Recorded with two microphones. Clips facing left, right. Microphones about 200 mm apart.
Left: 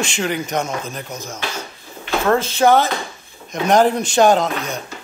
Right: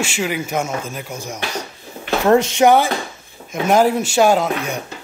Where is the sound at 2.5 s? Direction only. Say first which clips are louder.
Right 1 dB; 15° right (ahead or behind).